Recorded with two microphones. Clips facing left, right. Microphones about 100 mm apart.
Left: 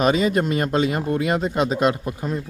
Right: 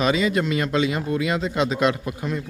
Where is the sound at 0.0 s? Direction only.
45° left (ahead or behind).